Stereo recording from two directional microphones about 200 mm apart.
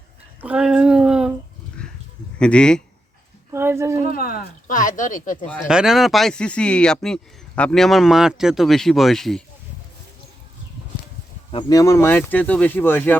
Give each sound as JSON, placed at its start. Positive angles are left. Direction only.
{"t": 0.4, "sound": "a sound", "side_deg": -5}
{"t": 2.4, "sound": "speech", "side_deg": 5}
{"t": 3.5, "sound": "a sound", "side_deg": -15}
{"t": 4.1, "sound": "speech", "side_deg": 45}
{"t": 5.5, "sound": "speech", "side_deg": 0}
{"t": 11.5, "sound": "speech", "side_deg": 15}